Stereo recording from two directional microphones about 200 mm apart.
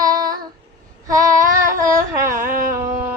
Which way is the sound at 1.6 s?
15° right (ahead or behind).